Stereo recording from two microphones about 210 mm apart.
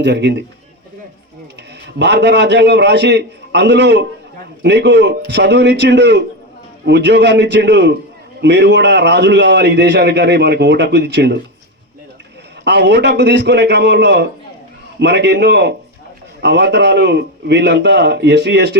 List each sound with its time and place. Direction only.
0.0 s a man's voice: 55° right (ahead or behind)
2.0 s a man's voice: 55° right (ahead or behind)
12.6 s a man's voice: 55° right (ahead or behind)